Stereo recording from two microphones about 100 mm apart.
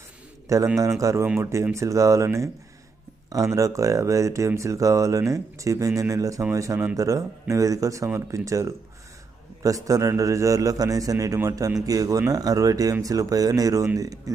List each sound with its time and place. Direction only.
0.4 s a man's voice: 30° right (ahead or behind)